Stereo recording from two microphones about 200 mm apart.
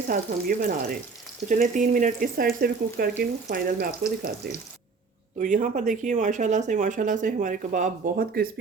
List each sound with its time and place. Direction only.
0.1 s speech: 45° right (ahead or behind)
5.4 s speech: 40° right (ahead or behind)